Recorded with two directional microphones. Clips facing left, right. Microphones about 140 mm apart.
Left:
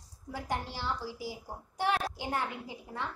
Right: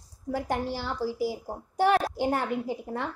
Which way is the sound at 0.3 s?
40° right (ahead or behind).